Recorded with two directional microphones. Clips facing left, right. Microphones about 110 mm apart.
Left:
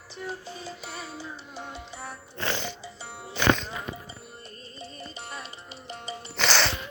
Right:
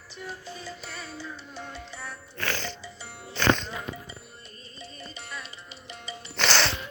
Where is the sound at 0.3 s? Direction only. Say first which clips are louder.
Left 2 dB; 20° left (ahead or behind).